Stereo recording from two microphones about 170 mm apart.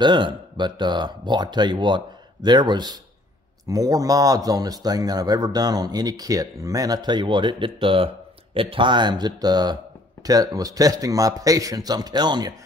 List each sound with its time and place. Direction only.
0.0 s a man's voice: 25° right (ahead or behind)